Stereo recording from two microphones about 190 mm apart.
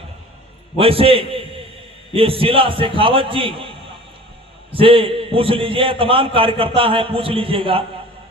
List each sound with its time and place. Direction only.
0.8 s a man's voice: 30° right (ahead or behind)
4.7 s a man's voice: 30° right (ahead or behind)